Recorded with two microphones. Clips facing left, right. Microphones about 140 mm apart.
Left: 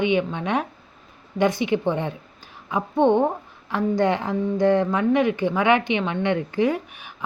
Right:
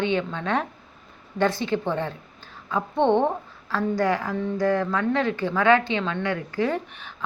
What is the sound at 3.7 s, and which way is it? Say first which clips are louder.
A woman's voice: left 2 dB; 20° left (ahead or behind).